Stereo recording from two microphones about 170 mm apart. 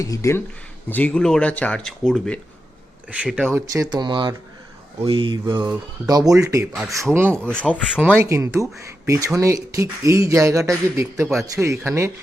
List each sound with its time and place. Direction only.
0.0 s speech: 20° left (ahead or behind); by 3.6 s 5° right (ahead or behind)
3.7 s speech: 20° right (ahead or behind)
6.7 s speech: centre (ahead or behind)
7.1 s speech: 15° right (ahead or behind)
7.5 s speech: 10° left (ahead or behind)
8.2 s speech: 15° right (ahead or behind)